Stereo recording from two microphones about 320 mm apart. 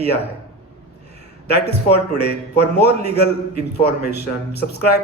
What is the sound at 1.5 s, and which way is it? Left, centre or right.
Speech, left.